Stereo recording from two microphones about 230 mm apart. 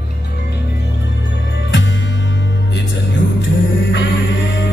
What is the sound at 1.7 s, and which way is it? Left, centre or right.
Music, left.